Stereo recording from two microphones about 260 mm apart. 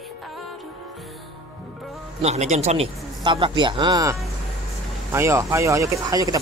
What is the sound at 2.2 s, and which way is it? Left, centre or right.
Speech, right.